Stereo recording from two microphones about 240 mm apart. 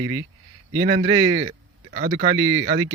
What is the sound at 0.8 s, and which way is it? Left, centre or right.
Speech, right.